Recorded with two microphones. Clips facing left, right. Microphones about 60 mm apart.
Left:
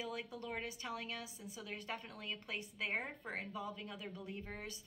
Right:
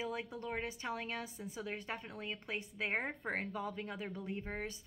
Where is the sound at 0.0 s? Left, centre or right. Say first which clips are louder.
Right 3 dB; right.